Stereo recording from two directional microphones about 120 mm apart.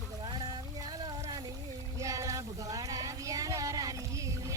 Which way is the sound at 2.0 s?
25° right (ahead or behind).